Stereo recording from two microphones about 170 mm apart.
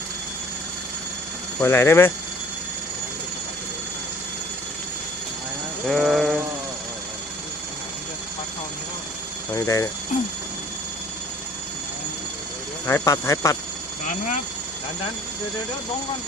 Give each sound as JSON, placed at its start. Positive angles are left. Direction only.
{"t": 1.6, "sound": "speech", "side_deg": 15}
{"t": 5.9, "sound": "sheep", "side_deg": 0}
{"t": 9.6, "sound": "speech", "side_deg": 15}
{"t": 12.9, "sound": "speech", "side_deg": 20}
{"t": 14.1, "sound": "speech", "side_deg": 50}